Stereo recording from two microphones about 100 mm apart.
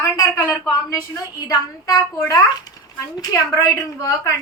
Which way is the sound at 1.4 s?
40° left (ahead or behind).